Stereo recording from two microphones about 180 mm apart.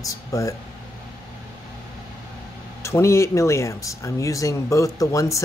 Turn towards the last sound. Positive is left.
turn(degrees=15)  # may be behind; listen again after turning